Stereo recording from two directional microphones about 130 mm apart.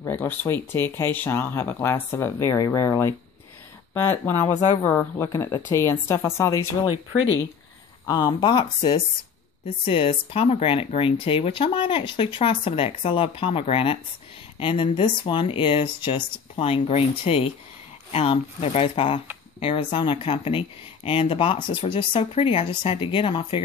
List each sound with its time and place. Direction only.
0.0 s speech: 15° left (ahead or behind)
6.8 s speech: 40° left (ahead or behind)